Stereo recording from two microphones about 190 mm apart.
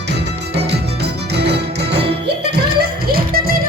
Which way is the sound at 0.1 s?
60° right (ahead or behind).